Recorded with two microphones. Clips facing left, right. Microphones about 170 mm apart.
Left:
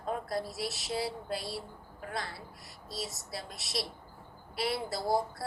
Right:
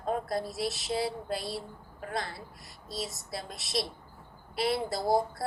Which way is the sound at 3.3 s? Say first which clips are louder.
Right 5 dB; 20° right (ahead or behind).